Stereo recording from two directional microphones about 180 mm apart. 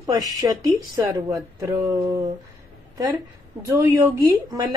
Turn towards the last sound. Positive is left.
turn(degrees=-15)  # may be behind; listen again after turning